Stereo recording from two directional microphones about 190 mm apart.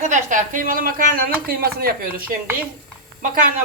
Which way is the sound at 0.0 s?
40° right (ahead or behind).